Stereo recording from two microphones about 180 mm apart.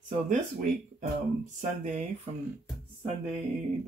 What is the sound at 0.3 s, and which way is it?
Speech, 50° right (ahead or behind).